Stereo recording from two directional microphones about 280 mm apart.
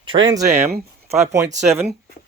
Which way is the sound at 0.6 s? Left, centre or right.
Right.